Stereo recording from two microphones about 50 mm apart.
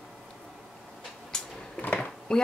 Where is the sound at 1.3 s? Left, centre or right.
Centre.